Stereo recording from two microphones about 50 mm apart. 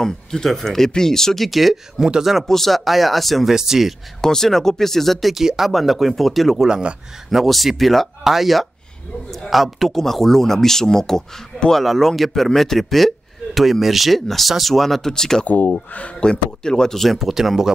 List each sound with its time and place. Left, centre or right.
0.0 s speech: centre
4.2 s speech: centre
6.7 s speech: right
7.2 s speech: centre
15.4 s speech: left
16.3 s speech: centre
17.3 s speech: centre